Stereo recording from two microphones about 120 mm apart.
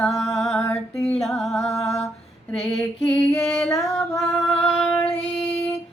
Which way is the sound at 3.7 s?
25° left (ahead or behind).